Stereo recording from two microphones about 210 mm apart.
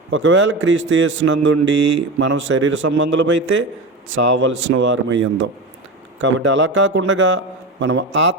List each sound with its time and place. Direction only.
0.1 s a man's voice: 65° right (ahead or behind)